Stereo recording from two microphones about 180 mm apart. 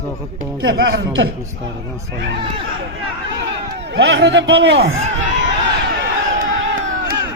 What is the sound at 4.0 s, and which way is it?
Speech, 75° right (ahead or behind).